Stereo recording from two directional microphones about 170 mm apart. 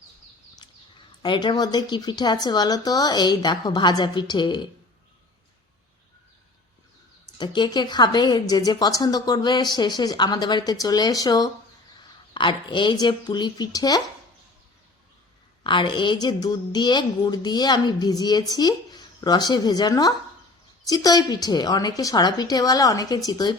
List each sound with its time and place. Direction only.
0.6 s a sound: 25° left (ahead or behind)
1.2 s a woman's voice: 25° left (ahead or behind)
7.3 s a woman's voice: 25° left (ahead or behind)
15.6 s a woman's voice: 30° left (ahead or behind)